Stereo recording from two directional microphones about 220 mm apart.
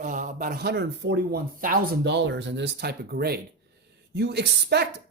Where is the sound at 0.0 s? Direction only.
35° right (ahead or behind).